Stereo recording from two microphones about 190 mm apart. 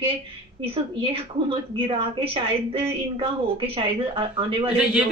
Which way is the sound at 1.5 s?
30° right (ahead or behind).